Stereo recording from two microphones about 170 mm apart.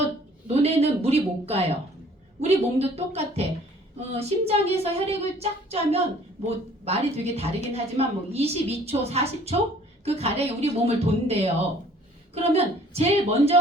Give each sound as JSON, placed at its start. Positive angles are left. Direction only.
{"t": 0.4, "sound": "a woman's voice", "side_deg": -35}